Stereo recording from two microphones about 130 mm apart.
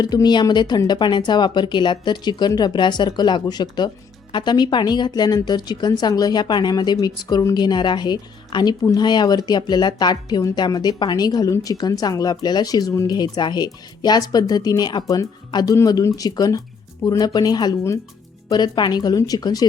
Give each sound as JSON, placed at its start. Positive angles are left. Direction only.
{"t": 0.0, "sound": "speech", "side_deg": 30}